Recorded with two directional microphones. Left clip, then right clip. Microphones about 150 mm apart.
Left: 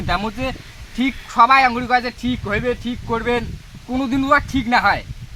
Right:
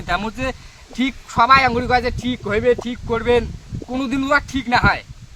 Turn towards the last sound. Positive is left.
turn(degrees=-35)  # may be behind; listen again after turning